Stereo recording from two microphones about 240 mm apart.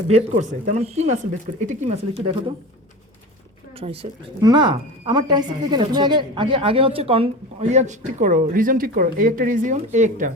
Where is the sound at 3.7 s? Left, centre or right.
Right.